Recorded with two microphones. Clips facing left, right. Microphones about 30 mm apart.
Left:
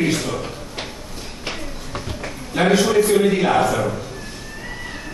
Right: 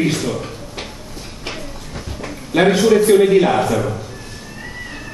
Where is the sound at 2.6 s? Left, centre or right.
Centre.